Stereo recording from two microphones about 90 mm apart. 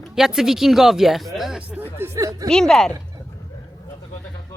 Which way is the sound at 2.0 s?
35° right (ahead or behind).